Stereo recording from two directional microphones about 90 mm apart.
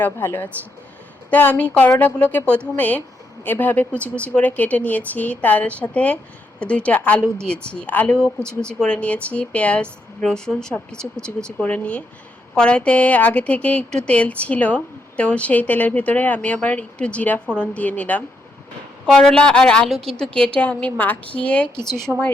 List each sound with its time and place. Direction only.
0.0 s speech: 20° left (ahead or behind)
8.1 s speech: 5° left (ahead or behind)
22.1 s speech: centre (ahead or behind)